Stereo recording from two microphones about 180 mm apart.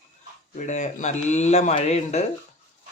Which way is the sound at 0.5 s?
40° left (ahead or behind).